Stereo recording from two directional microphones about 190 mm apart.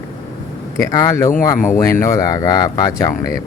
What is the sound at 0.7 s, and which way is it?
Speech, 20° left (ahead or behind).